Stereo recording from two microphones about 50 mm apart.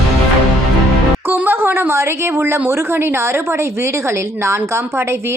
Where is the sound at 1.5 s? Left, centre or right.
Right.